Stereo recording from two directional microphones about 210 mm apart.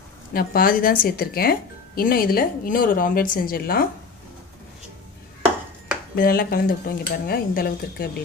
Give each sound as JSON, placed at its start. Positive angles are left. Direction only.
{"t": 0.3, "sound": "speech", "side_deg": 45}
{"t": 6.1, "sound": "speech", "side_deg": 45}